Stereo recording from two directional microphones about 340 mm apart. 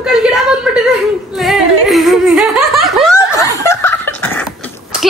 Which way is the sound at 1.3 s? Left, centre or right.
Centre.